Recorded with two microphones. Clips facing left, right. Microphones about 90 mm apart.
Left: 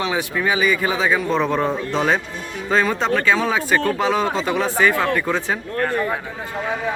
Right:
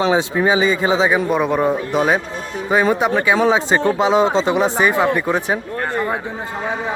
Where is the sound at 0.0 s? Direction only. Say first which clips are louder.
Right 5 dB; 25° right (ahead or behind).